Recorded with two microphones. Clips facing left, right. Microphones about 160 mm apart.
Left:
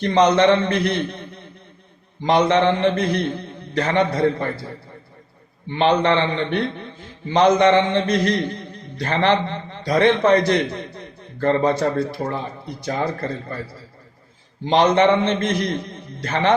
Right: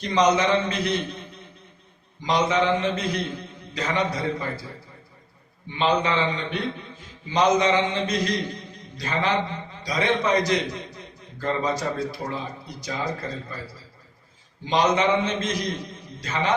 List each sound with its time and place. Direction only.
0.0 s a man's voice: 60° left (ahead or behind)
5.6 s a man's voice: 65° left (ahead or behind)
14.6 s a man's voice: 60° left (ahead or behind)